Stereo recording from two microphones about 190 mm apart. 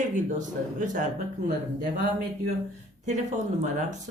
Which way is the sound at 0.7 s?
40° right (ahead or behind).